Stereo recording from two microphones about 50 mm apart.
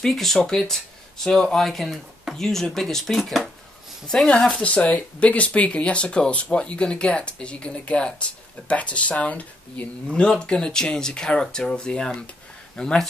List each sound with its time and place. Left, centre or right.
0.0 s speech: centre
4.1 s speech: centre
10.1 s speech: centre